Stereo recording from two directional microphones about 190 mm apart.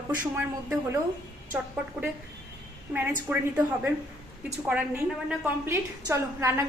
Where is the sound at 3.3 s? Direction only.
10° right (ahead or behind).